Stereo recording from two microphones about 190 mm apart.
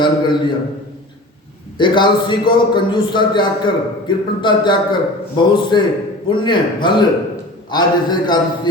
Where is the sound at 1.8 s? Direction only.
25° left (ahead or behind).